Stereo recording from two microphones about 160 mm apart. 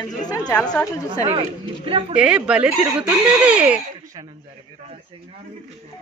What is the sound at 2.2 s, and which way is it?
Speech, 5° right (ahead or behind).